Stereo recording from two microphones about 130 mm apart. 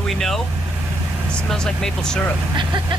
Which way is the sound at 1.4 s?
5° left (ahead or behind).